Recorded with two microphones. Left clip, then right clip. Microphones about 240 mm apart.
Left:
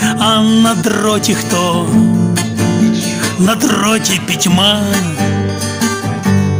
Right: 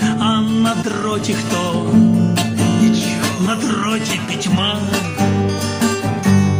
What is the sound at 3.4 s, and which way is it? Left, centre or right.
Speech, left.